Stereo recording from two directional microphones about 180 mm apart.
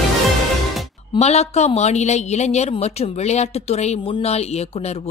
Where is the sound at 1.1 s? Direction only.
35° left (ahead or behind).